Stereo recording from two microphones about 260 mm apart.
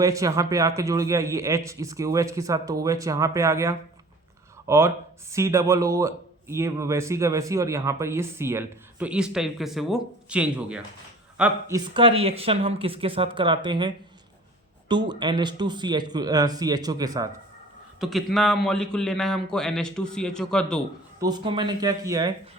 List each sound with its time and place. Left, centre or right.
0.0 s a man's voice: centre
11.9 s speech: right
18.0 s a man's voice: centre
21.2 s speech: centre